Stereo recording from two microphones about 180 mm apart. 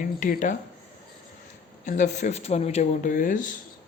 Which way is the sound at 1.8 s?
40° left (ahead or behind).